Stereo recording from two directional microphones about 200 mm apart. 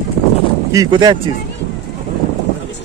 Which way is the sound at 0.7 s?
20° right (ahead or behind).